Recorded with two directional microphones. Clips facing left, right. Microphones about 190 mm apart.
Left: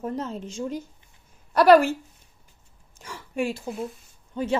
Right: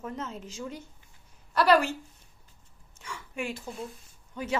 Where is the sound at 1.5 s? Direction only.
50° left (ahead or behind).